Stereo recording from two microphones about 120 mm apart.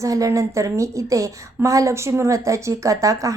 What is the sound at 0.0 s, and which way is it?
A woman's voice, 25° right (ahead or behind).